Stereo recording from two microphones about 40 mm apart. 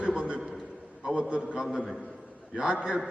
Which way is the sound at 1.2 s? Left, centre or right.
Right.